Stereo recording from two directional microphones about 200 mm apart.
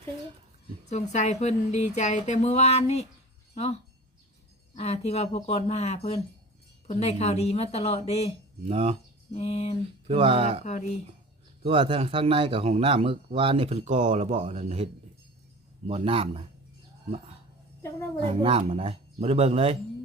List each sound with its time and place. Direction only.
0.9 s speech: 35° left (ahead or behind)
8.6 s speech: 30° right (ahead or behind)
9.3 s speech: 30° left (ahead or behind)
10.1 s a man's voice: 30° right (ahead or behind)
11.6 s a man's voice: 25° right (ahead or behind)
15.9 s a man's voice: 30° right (ahead or behind)
18.2 s a man's voice: 30° right (ahead or behind)